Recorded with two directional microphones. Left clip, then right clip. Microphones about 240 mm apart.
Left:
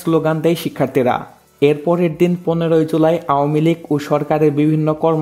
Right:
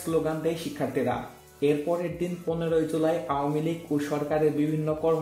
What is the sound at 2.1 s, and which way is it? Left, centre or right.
Speech, left.